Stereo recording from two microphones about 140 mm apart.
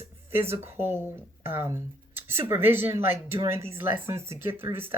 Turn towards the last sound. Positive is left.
turn(degrees=-20)  # may be behind; listen again after turning